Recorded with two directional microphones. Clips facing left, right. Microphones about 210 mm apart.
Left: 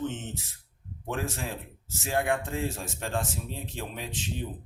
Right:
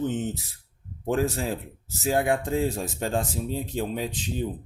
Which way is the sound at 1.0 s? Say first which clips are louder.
Right 8 dB; 35° right (ahead or behind).